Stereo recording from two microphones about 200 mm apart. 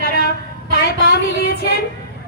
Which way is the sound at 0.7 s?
50° left (ahead or behind).